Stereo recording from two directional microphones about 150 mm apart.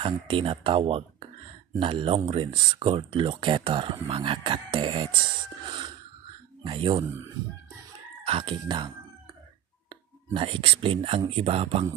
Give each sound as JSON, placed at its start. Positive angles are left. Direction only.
{"t": 0.0, "sound": "speech", "side_deg": -35}
{"t": 6.6, "sound": "speech", "side_deg": -35}
{"t": 8.3, "sound": "speech", "side_deg": -40}